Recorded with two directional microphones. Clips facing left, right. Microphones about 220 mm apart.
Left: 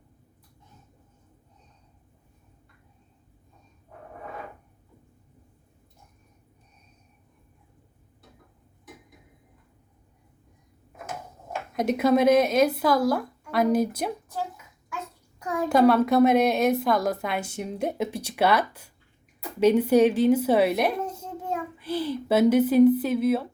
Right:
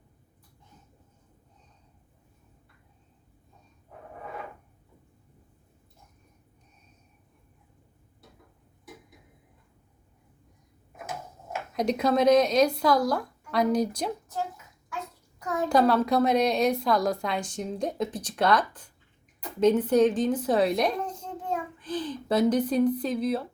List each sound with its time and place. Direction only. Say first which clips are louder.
11.7 s speech: left 3 dB; 5° left (ahead or behind)
15.4 s a woman's voice: left 3 dB; 5° left (ahead or behind)
19.4 s a sound: left 1 dB; 10° left (ahead or behind)
19.8 s a woman's voice: left 3 dB; 10° left (ahead or behind)